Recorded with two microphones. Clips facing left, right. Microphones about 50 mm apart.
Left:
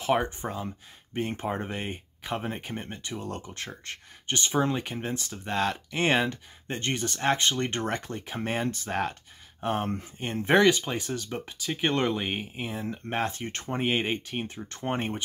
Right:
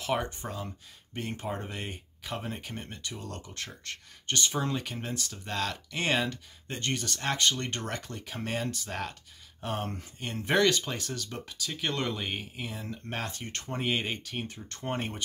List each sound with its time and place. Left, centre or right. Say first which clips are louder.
0.0 s speech: left 5 dB; left